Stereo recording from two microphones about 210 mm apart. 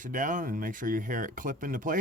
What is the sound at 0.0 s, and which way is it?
Speech, 40° right (ahead or behind).